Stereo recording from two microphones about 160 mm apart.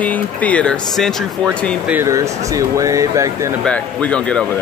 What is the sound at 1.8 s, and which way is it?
Speech, 15° right (ahead or behind).